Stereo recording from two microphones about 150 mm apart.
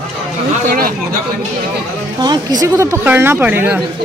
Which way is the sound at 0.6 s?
70° right (ahead or behind).